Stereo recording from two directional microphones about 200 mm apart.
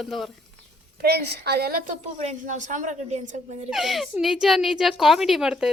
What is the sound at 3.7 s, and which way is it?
A woman's voice, centre (ahead or behind).